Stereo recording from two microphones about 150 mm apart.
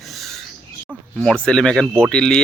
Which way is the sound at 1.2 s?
5° left (ahead or behind).